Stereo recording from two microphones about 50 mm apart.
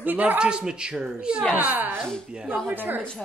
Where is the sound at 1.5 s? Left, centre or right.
Right.